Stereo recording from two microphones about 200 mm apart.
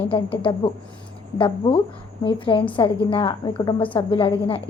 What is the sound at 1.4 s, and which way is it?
A woman's voice, 25° left (ahead or behind).